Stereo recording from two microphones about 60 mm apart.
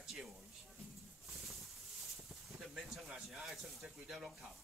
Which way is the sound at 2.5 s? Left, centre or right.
Centre.